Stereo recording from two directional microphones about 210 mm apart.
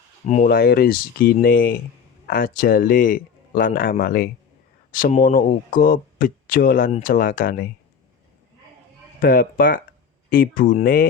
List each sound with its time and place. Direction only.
0.3 s speech: 40° left (ahead or behind)
9.2 s speech: 45° left (ahead or behind)